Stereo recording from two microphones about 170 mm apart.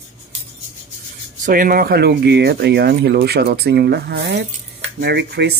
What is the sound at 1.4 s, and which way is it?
Speech, 55° right (ahead or behind).